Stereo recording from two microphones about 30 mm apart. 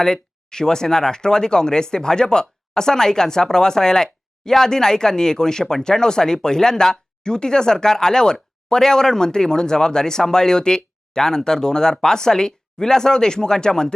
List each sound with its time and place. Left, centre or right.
0.0 s speech: left